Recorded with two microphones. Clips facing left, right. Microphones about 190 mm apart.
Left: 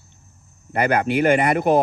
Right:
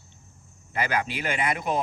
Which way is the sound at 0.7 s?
60° left (ahead or behind).